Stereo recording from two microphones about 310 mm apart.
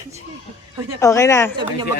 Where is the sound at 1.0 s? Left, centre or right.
Centre.